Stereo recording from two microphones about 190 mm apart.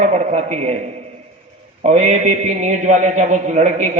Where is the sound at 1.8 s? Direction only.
35° right (ahead or behind).